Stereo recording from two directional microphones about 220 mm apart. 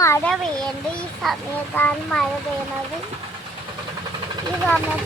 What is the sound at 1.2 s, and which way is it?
A child's voice, 5° left (ahead or behind).